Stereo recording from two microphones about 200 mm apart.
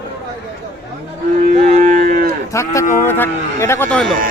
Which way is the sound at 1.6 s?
35° right (ahead or behind).